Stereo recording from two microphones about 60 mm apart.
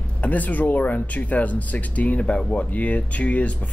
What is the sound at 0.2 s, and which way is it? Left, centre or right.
Speech, left.